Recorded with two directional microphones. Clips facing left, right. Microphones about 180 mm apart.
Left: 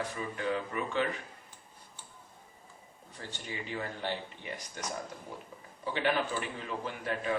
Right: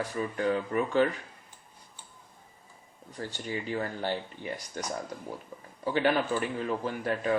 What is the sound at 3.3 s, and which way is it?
Speech, 40° right (ahead or behind).